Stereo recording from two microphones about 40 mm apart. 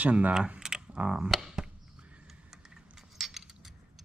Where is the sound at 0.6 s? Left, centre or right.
Centre.